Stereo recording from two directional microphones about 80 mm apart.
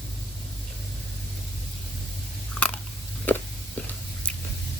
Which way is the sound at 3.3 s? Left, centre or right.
Left.